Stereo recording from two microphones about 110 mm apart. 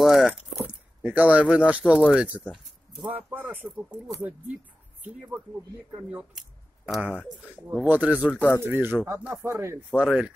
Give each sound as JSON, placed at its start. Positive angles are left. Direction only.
{"t": 0.0, "sound": "speech", "side_deg": -5}
{"t": 6.9, "sound": "speech", "side_deg": -10}
{"t": 9.8, "sound": "speech", "side_deg": -10}